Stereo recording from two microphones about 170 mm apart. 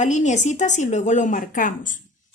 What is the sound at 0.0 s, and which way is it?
A woman's voice, 45° left (ahead or behind).